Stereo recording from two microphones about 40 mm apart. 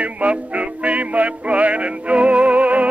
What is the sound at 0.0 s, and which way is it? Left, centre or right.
Music, right.